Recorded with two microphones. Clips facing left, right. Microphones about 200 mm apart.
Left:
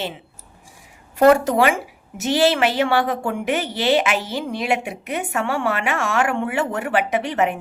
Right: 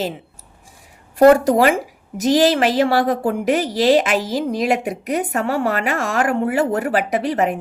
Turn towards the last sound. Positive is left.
turn(degrees=-35)  # may be behind; listen again after turning